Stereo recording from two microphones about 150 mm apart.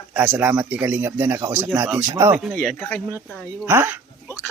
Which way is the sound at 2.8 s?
10° left (ahead or behind).